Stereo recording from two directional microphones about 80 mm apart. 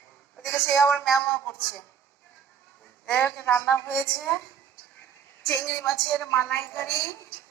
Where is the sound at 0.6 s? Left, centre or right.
Left.